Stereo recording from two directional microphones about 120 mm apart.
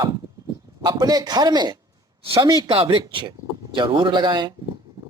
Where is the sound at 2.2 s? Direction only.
50° right (ahead or behind).